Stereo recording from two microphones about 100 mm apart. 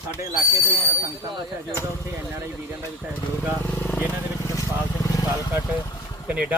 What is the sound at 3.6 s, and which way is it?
Vehicle, 20° left (ahead or behind).